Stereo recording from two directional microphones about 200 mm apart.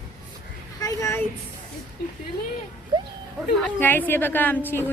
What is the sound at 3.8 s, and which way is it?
A woman's voice, 10° left (ahead or behind).